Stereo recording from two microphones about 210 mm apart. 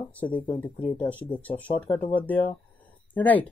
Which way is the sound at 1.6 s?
25° left (ahead or behind).